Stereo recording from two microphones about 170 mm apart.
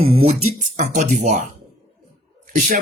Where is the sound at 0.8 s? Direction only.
45° right (ahead or behind).